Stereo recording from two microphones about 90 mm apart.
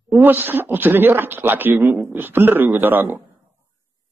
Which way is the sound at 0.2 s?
20° right (ahead or behind).